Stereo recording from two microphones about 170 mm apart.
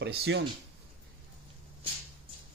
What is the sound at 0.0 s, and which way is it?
Speech, 80° right.